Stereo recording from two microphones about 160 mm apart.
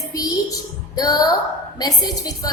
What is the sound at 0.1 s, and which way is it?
A woman's voice, 20° left (ahead or behind).